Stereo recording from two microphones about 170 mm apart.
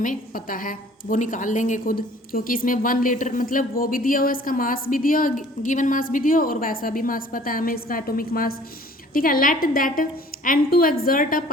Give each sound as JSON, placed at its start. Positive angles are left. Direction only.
{"t": 0.0, "sound": "a woman's voice", "side_deg": 55}